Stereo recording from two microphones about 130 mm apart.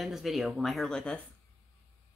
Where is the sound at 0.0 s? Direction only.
Centre (ahead or behind).